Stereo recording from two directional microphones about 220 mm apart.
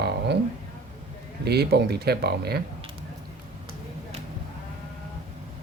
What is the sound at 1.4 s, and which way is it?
Speech, 45° right (ahead or behind).